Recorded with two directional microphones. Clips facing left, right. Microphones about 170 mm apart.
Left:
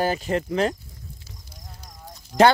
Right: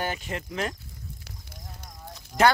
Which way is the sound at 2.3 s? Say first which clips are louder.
Left 5 dB; 5° right (ahead or behind).